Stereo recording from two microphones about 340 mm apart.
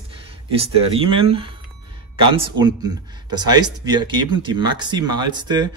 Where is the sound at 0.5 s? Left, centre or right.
Centre.